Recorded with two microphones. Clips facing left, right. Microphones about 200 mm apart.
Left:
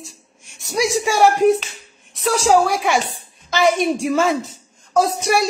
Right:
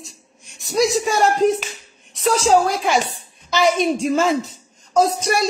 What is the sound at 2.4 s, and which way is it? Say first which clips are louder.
A woman's voice: left 2 dB; 70° left (ahead or behind).